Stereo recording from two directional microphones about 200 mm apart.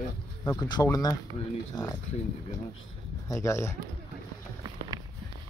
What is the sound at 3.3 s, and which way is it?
Speech, 15° left (ahead or behind).